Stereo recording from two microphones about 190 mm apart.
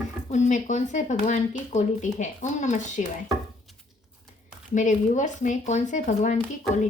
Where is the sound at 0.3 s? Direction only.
40° left (ahead or behind).